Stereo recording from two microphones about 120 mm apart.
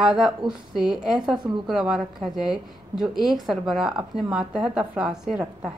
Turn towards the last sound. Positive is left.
turn(degrees=-5)  # may be behind; listen again after turning